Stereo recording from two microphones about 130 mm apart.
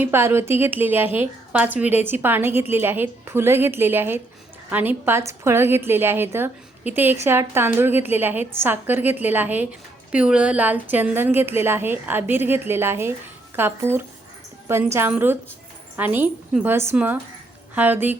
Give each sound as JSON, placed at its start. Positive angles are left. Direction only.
{"t": 0.0, "sound": "a woman's voice", "side_deg": -20}